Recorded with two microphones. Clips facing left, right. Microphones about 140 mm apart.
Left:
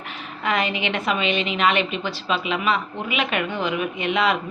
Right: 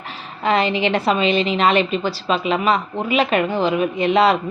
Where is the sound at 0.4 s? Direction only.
30° right (ahead or behind).